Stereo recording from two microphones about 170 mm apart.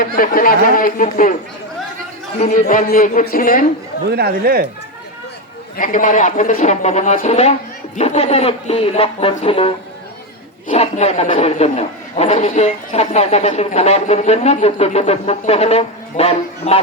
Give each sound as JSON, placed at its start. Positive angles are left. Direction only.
{"t": 0.0, "sound": "speech", "side_deg": 55}
{"t": 2.4, "sound": "speech", "side_deg": 45}
{"t": 4.1, "sound": "speech", "side_deg": -65}
{"t": 5.7, "sound": "a man's voice", "side_deg": 50}